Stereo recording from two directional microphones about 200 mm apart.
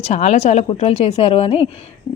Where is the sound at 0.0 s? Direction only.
35° left (ahead or behind).